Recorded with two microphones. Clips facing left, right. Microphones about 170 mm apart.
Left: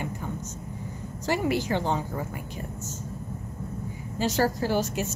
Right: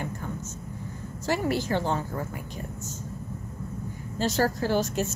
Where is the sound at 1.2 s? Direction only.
15° left (ahead or behind).